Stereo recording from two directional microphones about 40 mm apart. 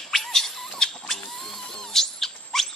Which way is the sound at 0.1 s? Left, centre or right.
Centre.